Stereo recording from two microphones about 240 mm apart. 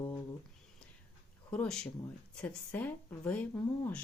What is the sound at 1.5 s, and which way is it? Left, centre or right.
Speech, centre.